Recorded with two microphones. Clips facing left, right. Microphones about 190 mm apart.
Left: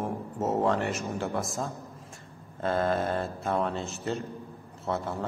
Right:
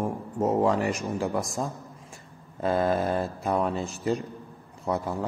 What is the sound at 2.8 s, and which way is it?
A man's voice, 5° right (ahead or behind).